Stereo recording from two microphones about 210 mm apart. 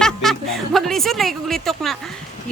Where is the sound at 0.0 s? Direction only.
Centre (ahead or behind).